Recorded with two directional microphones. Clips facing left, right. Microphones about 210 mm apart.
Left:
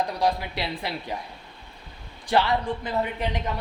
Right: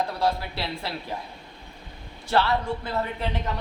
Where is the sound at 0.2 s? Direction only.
15° left (ahead or behind).